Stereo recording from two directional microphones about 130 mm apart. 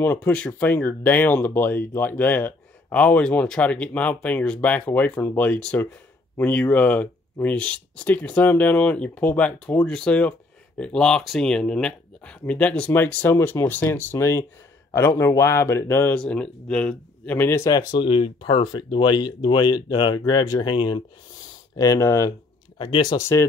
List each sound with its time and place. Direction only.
0.0 s speech: 15° left (ahead or behind)
18.0 s speech: 45° left (ahead or behind)
21.7 s speech: 25° left (ahead or behind)
22.8 s speech: 35° left (ahead or behind)
23.1 s speech: 20° left (ahead or behind)